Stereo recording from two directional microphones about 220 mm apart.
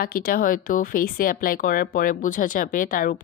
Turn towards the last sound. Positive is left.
turn(degrees=40)  # may be behind; listen again after turning